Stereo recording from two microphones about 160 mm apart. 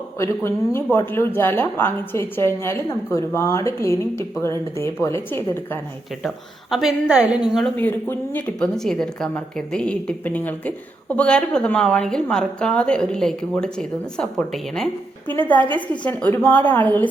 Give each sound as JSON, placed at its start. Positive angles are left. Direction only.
{"t": 0.2, "sound": "speech", "side_deg": 15}
{"t": 6.2, "sound": "speech", "side_deg": 0}
{"t": 7.8, "sound": "speech", "side_deg": 15}